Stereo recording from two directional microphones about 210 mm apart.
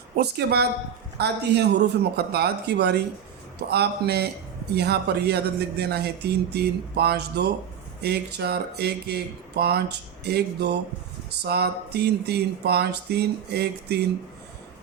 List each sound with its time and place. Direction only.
0.2 s speech: 50° right (ahead or behind)